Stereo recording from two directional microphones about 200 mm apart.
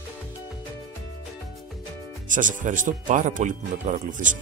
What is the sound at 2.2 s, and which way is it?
Speech, 40° right (ahead or behind).